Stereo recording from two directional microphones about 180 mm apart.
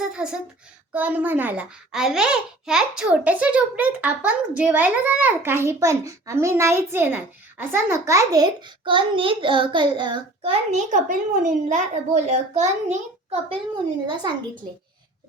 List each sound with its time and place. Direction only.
0.0 s a child's voice: 5° right (ahead or behind); by 13.6 s 35° right (ahead or behind)
14.1 s a child's voice: 25° right (ahead or behind)